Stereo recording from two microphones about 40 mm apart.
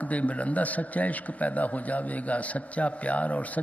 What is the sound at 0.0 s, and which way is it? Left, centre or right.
A man's voice, left.